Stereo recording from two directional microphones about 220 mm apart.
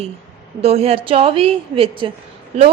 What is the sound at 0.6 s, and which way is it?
A woman's voice, 30° right (ahead or behind).